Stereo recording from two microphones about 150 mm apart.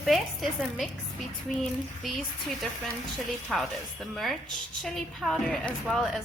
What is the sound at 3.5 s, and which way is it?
A woman's voice, centre (ahead or behind).